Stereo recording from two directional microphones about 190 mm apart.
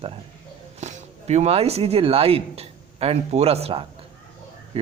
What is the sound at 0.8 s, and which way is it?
Speech, 40° right (ahead or behind).